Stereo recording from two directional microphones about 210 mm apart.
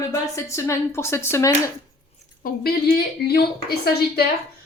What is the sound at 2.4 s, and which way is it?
Speech, 45° left (ahead or behind).